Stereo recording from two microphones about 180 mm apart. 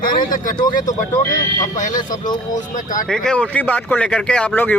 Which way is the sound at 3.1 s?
5° left (ahead or behind).